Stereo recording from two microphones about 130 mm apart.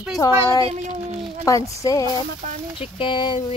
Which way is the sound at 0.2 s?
25° left (ahead or behind).